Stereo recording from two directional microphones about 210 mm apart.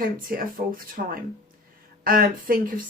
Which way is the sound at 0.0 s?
40° right (ahead or behind).